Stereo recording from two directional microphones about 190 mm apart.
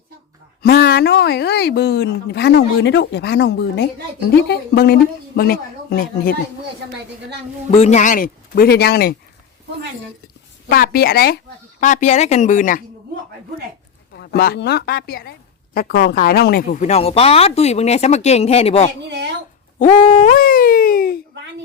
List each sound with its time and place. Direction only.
0.6 s a woman's voice: 55° left (ahead or behind)
7.7 s a woman's voice: 35° left (ahead or behind); by 9.1 s 55° left (ahead or behind)
10.7 s a woman's voice: 55° left (ahead or behind)
11.8 s speech: 40° left (ahead or behind)
14.2 s a woman's voice: 55° left (ahead or behind)
16.6 s speech: 40° left (ahead or behind)
19.0 s speech: 65° right (ahead or behind)
19.8 s speech: 35° left (ahead or behind)
20.3 s a sound: 50° left (ahead or behind)